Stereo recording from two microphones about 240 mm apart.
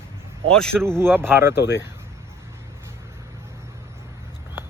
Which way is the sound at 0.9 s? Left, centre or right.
Centre.